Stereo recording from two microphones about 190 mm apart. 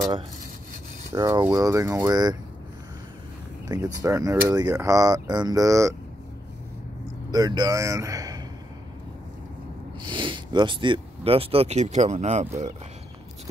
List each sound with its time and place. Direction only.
1.1 s speech: 15° right (ahead or behind)
3.6 s speech: 15° right (ahead or behind)
7.2 s speech: 20° right (ahead or behind)
10.0 s speech: 25° right (ahead or behind)